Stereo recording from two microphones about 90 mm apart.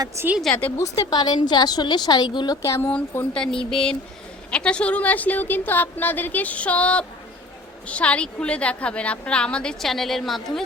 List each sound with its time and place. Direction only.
0.2 s a woman's voice: 30° right (ahead or behind)
0.8 s a woman's voice: 45° left (ahead or behind)
2.6 s speech: 35° left (ahead or behind)
2.8 s a woman's voice: 15° left (ahead or behind)